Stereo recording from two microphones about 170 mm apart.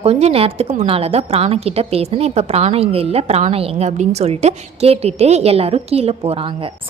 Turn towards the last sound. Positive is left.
turn(degrees=-35)  # may be behind; listen again after turning